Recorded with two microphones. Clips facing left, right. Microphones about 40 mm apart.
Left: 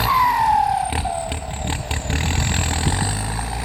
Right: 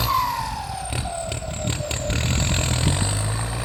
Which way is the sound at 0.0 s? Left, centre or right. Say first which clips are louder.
Left 6 dB; centre.